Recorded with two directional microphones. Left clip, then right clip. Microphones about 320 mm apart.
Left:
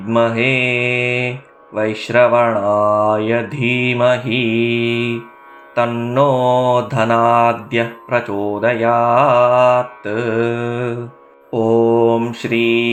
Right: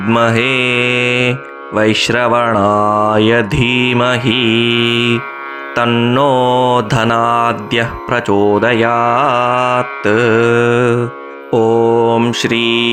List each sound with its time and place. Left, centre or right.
0.1 s mantra: right